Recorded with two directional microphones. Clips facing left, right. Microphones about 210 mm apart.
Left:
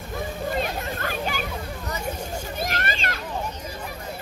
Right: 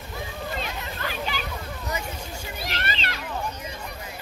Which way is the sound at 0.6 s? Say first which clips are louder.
Left 5 dB; 50° left (ahead or behind).